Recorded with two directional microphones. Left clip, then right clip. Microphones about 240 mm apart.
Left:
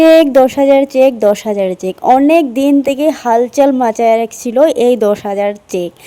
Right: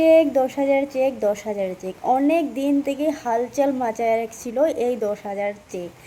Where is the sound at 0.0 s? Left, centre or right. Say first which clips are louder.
Left 9 dB; left.